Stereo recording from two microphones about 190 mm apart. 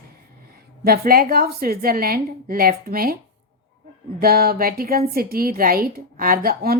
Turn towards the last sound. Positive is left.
turn(degrees=-50)  # may be behind; listen again after turning